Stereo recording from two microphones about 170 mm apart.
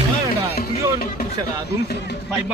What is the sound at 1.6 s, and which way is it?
Music, 70° left (ahead or behind).